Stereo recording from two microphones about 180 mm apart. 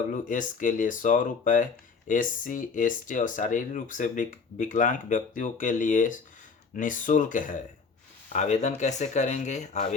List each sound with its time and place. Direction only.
0.1 s speech: 45° left (ahead or behind)